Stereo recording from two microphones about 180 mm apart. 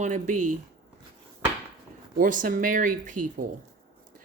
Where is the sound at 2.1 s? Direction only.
50° right (ahead or behind).